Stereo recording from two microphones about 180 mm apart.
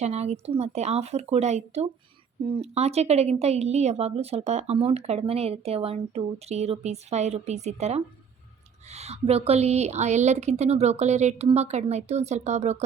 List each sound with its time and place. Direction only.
0.0 s speech: 35° right (ahead or behind)